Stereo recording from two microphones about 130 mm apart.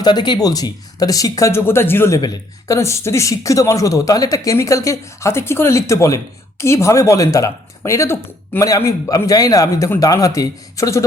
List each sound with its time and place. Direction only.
0.0 s speech: 35° left (ahead or behind)